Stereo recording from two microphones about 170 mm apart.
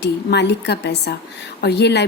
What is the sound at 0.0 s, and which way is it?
A woman's voice, 75° left (ahead or behind).